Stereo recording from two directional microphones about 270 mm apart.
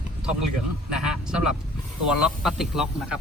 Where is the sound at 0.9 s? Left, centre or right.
Centre.